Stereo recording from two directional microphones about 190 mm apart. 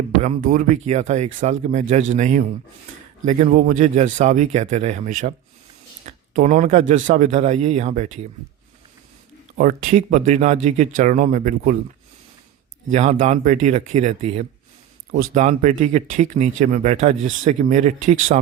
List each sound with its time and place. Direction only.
0.2 s speech: 45° right (ahead or behind)
9.6 s speech: 45° right (ahead or behind)
12.9 s speech: 40° right (ahead or behind)